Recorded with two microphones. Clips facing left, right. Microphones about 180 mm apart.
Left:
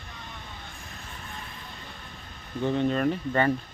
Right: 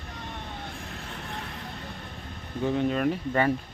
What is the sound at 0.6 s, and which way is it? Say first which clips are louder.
Vehicle: right 5 dB; 65° right (ahead or behind).